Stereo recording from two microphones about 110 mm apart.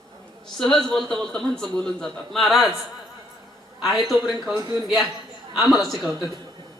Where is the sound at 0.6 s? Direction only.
5° left (ahead or behind).